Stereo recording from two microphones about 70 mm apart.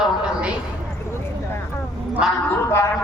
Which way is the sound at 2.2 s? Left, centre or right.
Centre.